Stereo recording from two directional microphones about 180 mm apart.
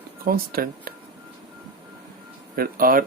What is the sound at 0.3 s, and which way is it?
Speech, 55° right (ahead or behind).